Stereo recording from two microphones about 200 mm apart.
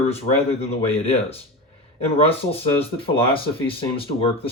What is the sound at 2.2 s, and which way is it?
Speech, 30° left (ahead or behind).